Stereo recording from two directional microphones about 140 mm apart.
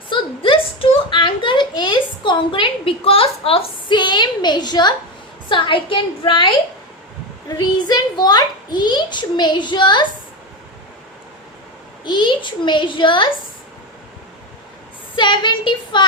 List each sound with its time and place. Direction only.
0.1 s a sound: 40° left (ahead or behind)
5.5 s a child's voice: 35° left (ahead or behind)
12.0 s a child's voice: 35° left (ahead or behind)
15.1 s a child's voice: 35° left (ahead or behind)